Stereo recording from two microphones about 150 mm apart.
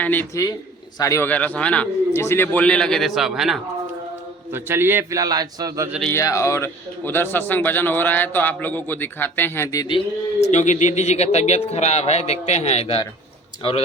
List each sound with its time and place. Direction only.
0.0 s a man's voice: 10° left (ahead or behind)
4.5 s a man's voice: 15° right (ahead or behind)
6.1 s a man's voice: 20° left (ahead or behind)
10.4 s speech: 50° left (ahead or behind)